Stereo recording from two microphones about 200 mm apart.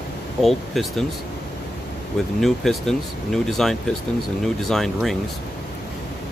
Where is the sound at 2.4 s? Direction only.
Centre (ahead or behind).